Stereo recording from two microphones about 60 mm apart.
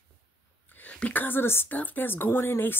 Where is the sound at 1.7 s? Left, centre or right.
Left.